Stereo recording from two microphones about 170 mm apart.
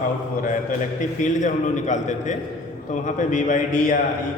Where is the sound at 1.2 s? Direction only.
45° left (ahead or behind).